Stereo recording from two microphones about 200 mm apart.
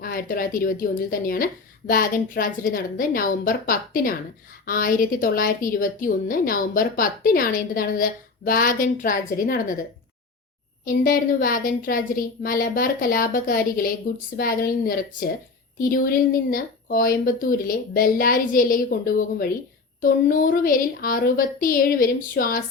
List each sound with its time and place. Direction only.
0.0 s a woman's voice: 45° left (ahead or behind)
11.0 s a woman's voice: 45° left (ahead or behind)